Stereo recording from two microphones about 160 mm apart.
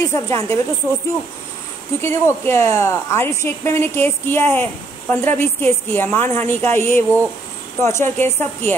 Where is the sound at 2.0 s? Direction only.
15° left (ahead or behind).